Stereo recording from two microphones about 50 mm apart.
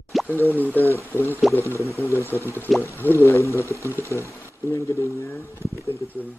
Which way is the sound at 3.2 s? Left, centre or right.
Left.